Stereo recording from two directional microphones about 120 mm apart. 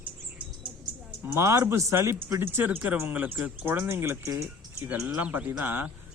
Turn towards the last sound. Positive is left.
turn(degrees=-15)  # may be behind; listen again after turning